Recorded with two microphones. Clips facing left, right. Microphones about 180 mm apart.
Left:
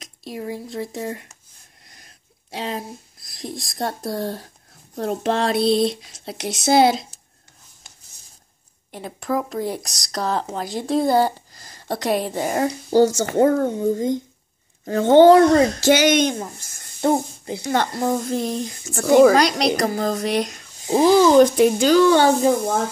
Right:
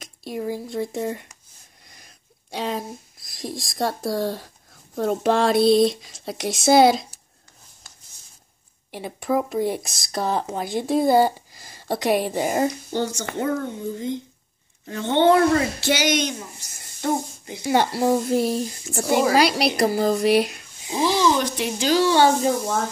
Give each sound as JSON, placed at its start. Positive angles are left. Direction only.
{"t": 0.0, "sound": "speech", "side_deg": 0}
{"t": 8.9, "sound": "speech", "side_deg": 0}
{"t": 12.6, "sound": "speech", "side_deg": 40}
{"t": 17.0, "sound": "speech", "side_deg": 30}
{"t": 17.6, "sound": "speech", "side_deg": -10}
{"t": 21.0, "sound": "speech", "side_deg": 45}